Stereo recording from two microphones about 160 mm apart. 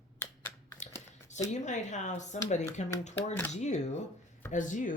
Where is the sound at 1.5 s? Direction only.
45° left (ahead or behind).